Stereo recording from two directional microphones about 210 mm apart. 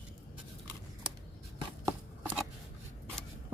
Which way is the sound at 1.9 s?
5° right (ahead or behind).